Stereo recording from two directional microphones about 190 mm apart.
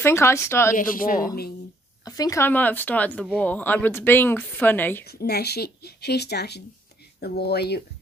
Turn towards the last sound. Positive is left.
turn(degrees=60)  # may be behind; listen again after turning